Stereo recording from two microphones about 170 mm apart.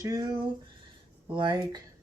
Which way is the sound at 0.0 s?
20° right (ahead or behind).